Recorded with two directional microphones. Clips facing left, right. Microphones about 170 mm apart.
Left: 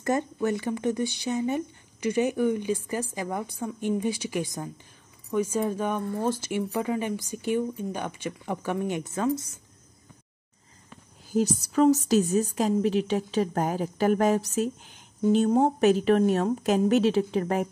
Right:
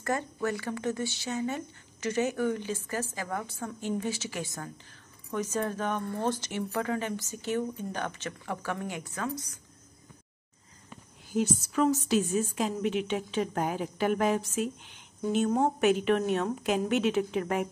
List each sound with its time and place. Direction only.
0.0 s speech: 20° left (ahead or behind)
11.3 s speech: 40° left (ahead or behind)